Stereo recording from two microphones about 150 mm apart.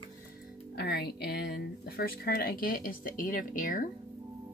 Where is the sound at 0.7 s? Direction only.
90° left; by 3.9 s 65° left (ahead or behind).